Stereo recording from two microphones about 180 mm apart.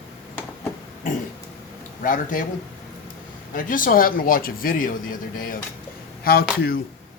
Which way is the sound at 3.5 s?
50° left (ahead or behind).